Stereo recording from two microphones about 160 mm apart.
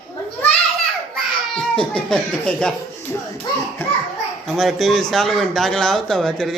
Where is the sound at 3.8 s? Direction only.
15° left (ahead or behind).